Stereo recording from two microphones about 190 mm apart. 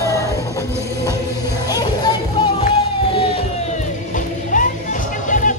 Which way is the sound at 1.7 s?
20° left (ahead or behind).